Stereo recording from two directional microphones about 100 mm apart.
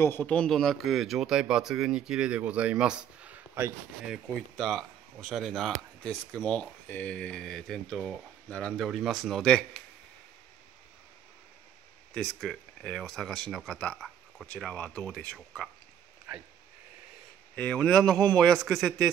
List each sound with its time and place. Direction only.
0.0 s speech: 20° left (ahead or behind); by 3.7 s 20° right (ahead or behind)
4.0 s speech: centre (ahead or behind)
12.1 s speech: 5° left (ahead or behind)
16.3 s speech: 10° right (ahead or behind)
17.6 s speech: 10° left (ahead or behind)